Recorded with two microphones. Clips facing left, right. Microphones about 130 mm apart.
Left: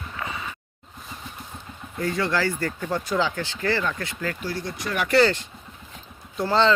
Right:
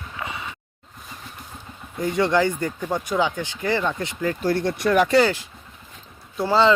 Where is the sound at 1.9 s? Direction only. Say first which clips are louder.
Right 5 dB; 20° right (ahead or behind).